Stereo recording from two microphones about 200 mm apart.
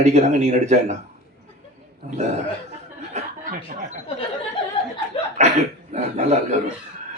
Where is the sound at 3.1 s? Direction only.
35° right (ahead or behind).